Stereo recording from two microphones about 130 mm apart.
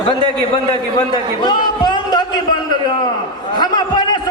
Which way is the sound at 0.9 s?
35° left (ahead or behind).